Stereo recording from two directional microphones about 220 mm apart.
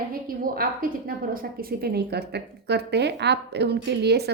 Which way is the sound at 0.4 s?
40° right (ahead or behind).